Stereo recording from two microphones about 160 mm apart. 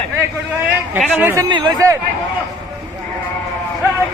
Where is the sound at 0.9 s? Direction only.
15° right (ahead or behind).